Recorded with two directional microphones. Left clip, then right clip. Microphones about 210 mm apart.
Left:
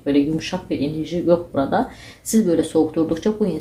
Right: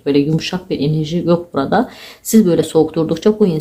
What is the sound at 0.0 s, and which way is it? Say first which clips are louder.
Speech: right 4 dB; 30° right (ahead or behind).